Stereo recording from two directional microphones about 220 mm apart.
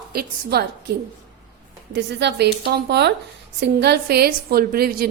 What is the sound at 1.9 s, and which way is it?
A woman's voice, 50° right (ahead or behind).